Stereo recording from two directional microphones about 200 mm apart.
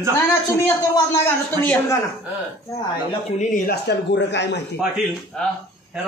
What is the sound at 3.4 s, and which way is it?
Speech, 40° left (ahead or behind).